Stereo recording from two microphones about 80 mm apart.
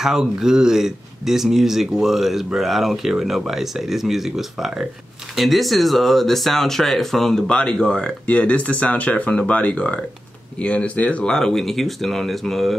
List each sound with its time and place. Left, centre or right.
0.0 s speech: centre